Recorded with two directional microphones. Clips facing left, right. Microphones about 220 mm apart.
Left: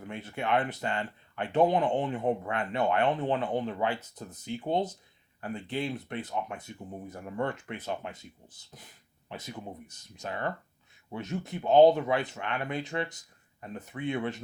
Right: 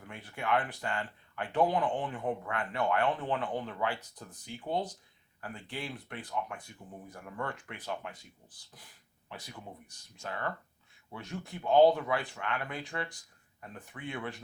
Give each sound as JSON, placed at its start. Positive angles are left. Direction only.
{"t": 0.0, "sound": "speech", "side_deg": 25}